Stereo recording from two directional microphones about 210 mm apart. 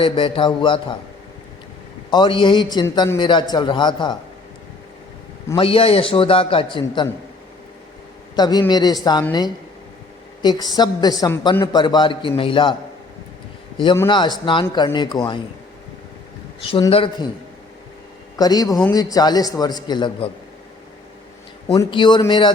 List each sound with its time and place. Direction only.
0.0 s a woman's voice: 25° left (ahead or behind)
2.0 s a woman's voice: 20° left (ahead or behind)
5.5 s a woman's voice: 25° left (ahead or behind)
8.4 s a woman's voice: 20° left (ahead or behind)
10.4 s a woman's voice: 20° left (ahead or behind)
13.7 s a woman's voice: 20° left (ahead or behind)
16.6 s a woman's voice: 25° left (ahead or behind)
18.3 s a man's voice: 20° left (ahead or behind)
21.7 s a woman's voice: 20° left (ahead or behind)